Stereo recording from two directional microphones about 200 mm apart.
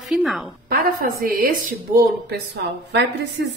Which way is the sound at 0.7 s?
45° right (ahead or behind).